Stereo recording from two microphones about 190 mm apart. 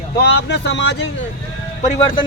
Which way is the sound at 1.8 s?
30° left (ahead or behind).